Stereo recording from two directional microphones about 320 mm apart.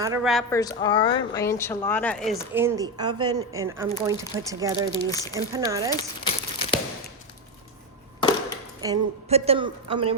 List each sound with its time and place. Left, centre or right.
0.0 s speech: centre
0.5 s a woman's voice: centre
4.9 s speech: centre
5.5 s a woman's voice: centre
6.0 s crumpling: centre
8.2 s a sound: centre
8.8 s a woman's voice: centre